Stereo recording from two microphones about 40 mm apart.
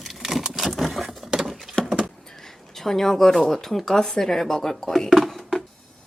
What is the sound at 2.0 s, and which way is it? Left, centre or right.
Speech, centre.